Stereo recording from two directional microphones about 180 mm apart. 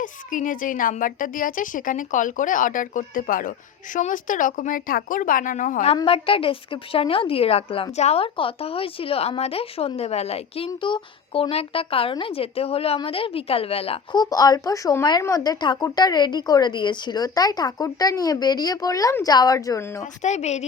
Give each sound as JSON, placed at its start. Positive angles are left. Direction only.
{"t": 0.0, "sound": "a woman's voice", "side_deg": 45}
{"t": 20.2, "sound": "a woman's voice", "side_deg": 40}